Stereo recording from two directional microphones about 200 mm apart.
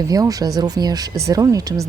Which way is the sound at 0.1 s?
20° right (ahead or behind).